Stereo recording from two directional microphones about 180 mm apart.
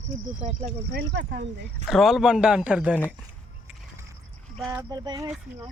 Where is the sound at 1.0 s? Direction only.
70° right (ahead or behind).